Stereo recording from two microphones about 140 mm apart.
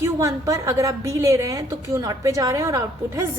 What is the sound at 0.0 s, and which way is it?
A woman's voice, 25° right (ahead or behind).